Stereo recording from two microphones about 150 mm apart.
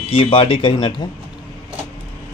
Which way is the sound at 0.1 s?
35° left (ahead or behind).